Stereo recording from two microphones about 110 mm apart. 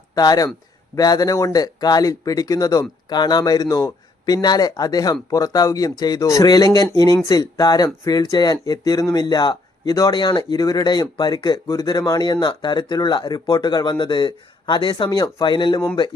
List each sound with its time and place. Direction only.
0.1 s speech: 35° left (ahead or behind)